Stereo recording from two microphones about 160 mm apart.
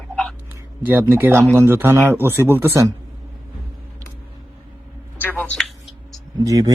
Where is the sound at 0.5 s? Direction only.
15° right (ahead or behind).